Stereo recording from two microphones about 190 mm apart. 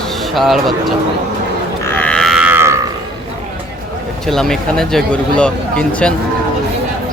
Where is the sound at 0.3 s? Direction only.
Centre (ahead or behind).